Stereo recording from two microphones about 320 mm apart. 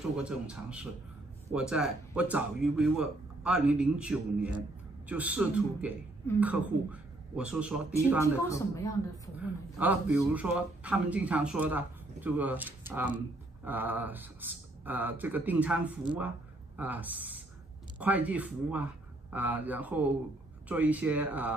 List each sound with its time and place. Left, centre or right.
0.2 s speech: centre
8.2 s speech: centre
9.4 s speech: centre